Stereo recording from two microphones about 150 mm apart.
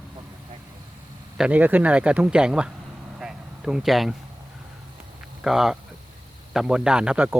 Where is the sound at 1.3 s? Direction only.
5° right (ahead or behind).